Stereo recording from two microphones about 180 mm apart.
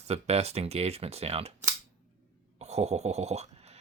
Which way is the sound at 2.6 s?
35° right (ahead or behind).